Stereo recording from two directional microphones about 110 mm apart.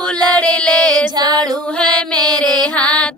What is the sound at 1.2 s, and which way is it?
Music, 40° right (ahead or behind).